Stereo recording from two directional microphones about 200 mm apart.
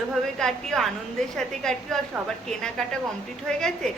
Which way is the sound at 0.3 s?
Centre (ahead or behind).